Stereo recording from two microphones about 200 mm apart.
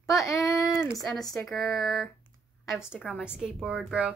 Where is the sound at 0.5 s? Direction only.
15° left (ahead or behind).